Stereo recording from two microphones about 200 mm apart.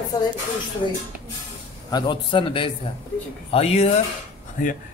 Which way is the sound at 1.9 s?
20° left (ahead or behind).